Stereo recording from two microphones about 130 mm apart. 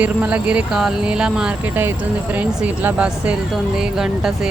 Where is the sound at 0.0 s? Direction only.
10° right (ahead or behind).